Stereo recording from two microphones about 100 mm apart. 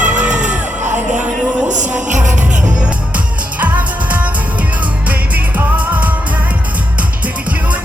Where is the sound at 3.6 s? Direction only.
15° right (ahead or behind).